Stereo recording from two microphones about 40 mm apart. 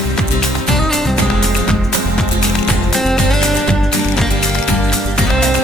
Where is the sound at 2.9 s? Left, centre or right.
Centre.